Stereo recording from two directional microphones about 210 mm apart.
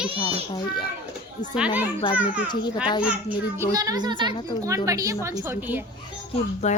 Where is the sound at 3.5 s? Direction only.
15° right (ahead or behind).